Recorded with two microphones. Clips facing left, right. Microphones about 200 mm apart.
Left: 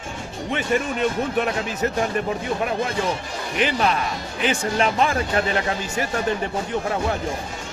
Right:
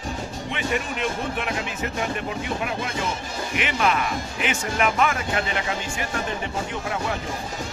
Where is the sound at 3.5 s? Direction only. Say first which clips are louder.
Left 2 dB; 35° left (ahead or behind).